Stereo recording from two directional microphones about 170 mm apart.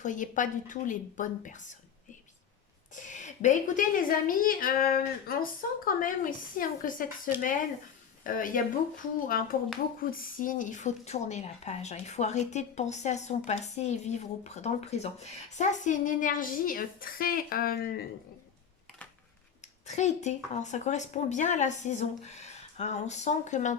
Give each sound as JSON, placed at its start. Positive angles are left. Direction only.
{"t": 0.0, "sound": "a woman's voice", "side_deg": 50}
{"t": 2.9, "sound": "a woman's voice", "side_deg": 45}
{"t": 8.2, "sound": "a woman's voice", "side_deg": 50}
{"t": 19.9, "sound": "a woman's voice", "side_deg": 40}